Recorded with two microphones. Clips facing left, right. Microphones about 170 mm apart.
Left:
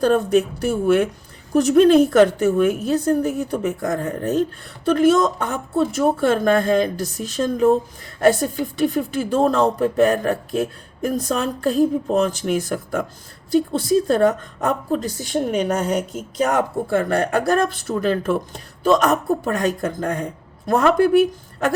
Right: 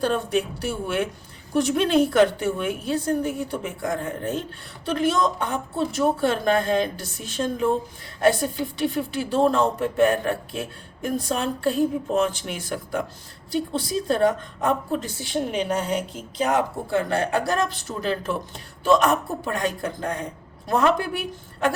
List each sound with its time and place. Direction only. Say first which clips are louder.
0.0 s a woman's voice: left 7 dB; 45° left (ahead or behind)